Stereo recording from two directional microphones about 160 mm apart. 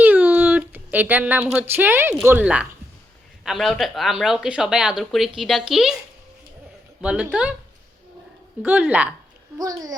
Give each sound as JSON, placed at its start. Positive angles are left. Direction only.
{"t": 0.0, "sound": "a sound", "side_deg": -10}
{"t": 2.2, "sound": "speech", "side_deg": -10}
{"t": 7.0, "sound": "speech", "side_deg": -5}
{"t": 8.6, "sound": "speech", "side_deg": -10}
{"t": 9.6, "sound": "a child's voice", "side_deg": -25}